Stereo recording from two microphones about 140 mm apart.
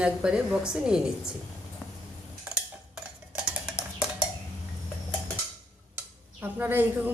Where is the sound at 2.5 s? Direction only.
5° right (ahead or behind).